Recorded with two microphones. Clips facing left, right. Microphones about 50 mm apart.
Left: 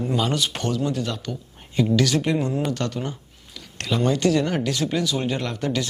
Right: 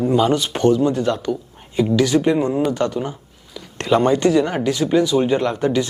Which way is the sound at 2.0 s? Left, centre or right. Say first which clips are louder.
Right 6 dB; centre.